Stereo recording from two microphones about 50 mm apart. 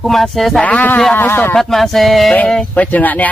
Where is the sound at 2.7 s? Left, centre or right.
Left.